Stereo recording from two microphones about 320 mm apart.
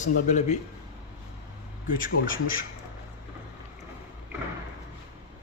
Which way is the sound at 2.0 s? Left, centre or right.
Left.